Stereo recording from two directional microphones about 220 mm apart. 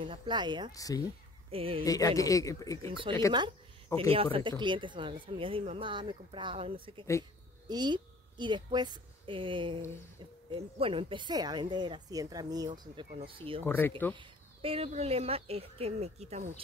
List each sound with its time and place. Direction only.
0.0 s speech: 20° right (ahead or behind)
0.7 s speech: 15° left (ahead or behind)
1.5 s speech: 25° right (ahead or behind)
1.9 s speech: 15° left (ahead or behind)
4.1 s a woman's voice: 25° right (ahead or behind)
13.7 s speech: 10° left (ahead or behind)
14.1 s speech: 25° right (ahead or behind)